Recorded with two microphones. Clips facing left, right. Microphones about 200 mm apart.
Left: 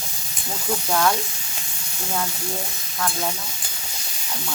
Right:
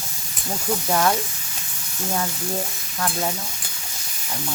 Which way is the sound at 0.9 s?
15° right (ahead or behind).